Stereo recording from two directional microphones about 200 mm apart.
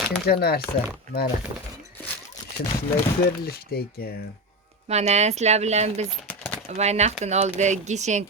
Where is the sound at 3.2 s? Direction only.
50° left (ahead or behind).